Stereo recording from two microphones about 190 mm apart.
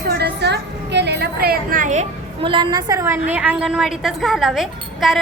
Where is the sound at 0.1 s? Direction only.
60° right (ahead or behind); by 2.0 s 40° right (ahead or behind).